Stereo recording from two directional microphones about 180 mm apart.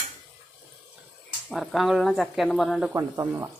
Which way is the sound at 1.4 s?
Centre (ahead or behind).